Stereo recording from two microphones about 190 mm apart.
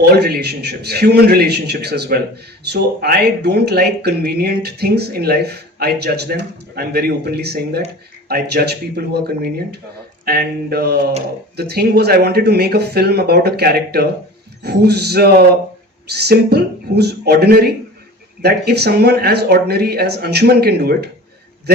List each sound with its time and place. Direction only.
0.0 s speech: 55° right (ahead or behind)